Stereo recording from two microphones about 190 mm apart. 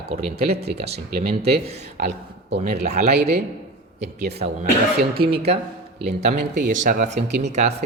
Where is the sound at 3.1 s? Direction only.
60° right (ahead or behind).